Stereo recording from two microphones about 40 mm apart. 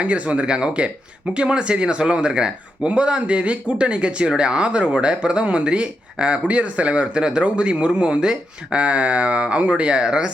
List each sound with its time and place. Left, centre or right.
0.0 s speech: right